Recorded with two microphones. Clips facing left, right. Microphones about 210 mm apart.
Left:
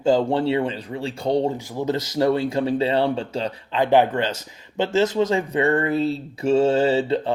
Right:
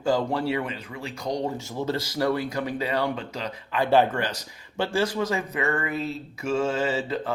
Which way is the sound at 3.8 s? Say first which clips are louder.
Left 3 dB; 20° left (ahead or behind).